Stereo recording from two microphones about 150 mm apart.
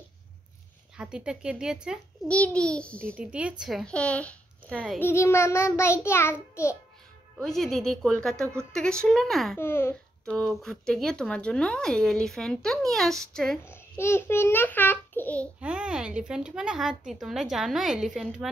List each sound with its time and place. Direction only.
0.9 s speech: 5° right (ahead or behind)
2.2 s child singing: 10° left (ahead or behind)
3.2 s speech: 10° right (ahead or behind)
4.9 s child singing: 15° left (ahead or behind)
7.3 s speech: centre (ahead or behind)
9.6 s child singing: 15° left (ahead or behind)
10.2 s speech: 5° left (ahead or behind)
13.7 s a child's voice: 15° left (ahead or behind)
15.6 s speech: 5° right (ahead or behind)